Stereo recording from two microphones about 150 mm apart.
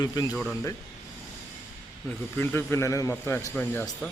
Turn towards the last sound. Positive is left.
turn(degrees=15)  # may be behind; listen again after turning